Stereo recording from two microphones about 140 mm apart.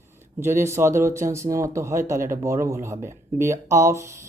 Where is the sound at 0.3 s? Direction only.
20° right (ahead or behind).